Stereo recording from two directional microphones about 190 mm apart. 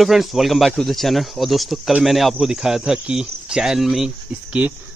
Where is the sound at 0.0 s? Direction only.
Centre (ahead or behind).